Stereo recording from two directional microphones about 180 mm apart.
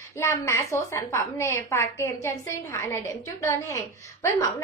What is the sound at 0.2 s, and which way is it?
A woman's voice, 15° left (ahead or behind).